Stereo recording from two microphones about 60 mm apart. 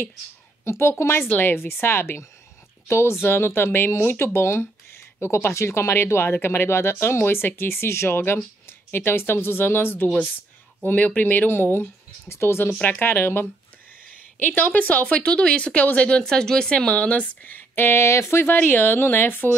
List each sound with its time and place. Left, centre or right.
0.7 s speech: left
10.9 s speech: left
18.5 s speech: left